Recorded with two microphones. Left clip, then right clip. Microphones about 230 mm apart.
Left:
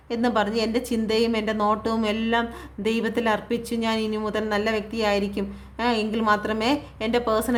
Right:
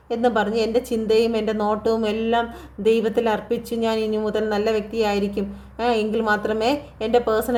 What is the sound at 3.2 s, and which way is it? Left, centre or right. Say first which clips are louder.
A woman's voice: right 3 dB; left.